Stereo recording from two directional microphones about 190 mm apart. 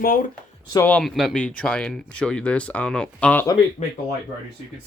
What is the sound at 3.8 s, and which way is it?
Speech, 35° left (ahead or behind).